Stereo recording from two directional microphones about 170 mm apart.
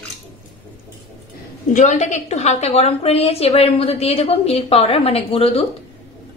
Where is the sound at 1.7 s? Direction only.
45° left (ahead or behind).